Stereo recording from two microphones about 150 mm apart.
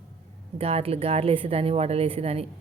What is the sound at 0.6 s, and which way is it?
A woman's voice, 40° right (ahead or behind).